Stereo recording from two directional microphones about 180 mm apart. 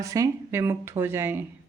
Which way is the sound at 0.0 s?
15° right (ahead or behind).